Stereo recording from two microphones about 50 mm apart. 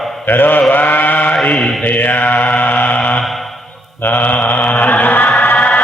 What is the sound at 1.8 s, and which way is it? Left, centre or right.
Mantra, left.